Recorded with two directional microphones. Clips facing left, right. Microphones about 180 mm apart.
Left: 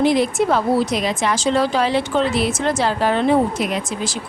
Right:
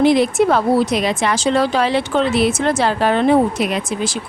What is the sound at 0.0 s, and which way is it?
A woman's voice, 70° right (ahead or behind).